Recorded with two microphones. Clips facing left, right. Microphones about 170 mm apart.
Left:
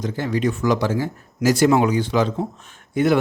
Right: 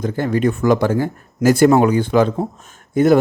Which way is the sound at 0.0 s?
50° right (ahead or behind).